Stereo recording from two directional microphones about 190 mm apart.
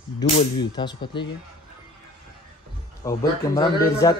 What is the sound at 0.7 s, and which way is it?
Speech, 25° left (ahead or behind).